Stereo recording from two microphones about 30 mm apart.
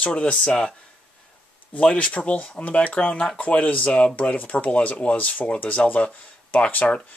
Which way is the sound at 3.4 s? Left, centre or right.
Left.